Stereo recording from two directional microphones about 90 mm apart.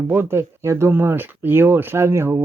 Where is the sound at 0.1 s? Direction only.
25° right (ahead or behind).